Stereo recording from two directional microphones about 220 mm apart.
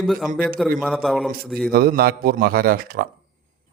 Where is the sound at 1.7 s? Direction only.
45° right (ahead or behind).